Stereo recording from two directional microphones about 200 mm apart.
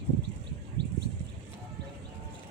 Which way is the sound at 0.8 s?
60° right (ahead or behind).